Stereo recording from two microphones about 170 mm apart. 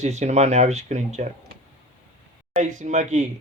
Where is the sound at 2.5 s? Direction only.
45° right (ahead or behind).